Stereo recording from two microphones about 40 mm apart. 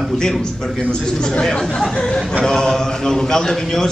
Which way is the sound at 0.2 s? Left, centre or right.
Centre.